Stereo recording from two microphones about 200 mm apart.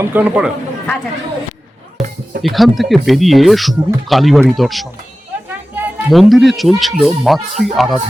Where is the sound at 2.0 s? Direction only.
Centre (ahead or behind).